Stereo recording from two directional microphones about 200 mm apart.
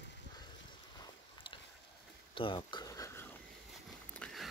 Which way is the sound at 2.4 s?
25° left (ahead or behind).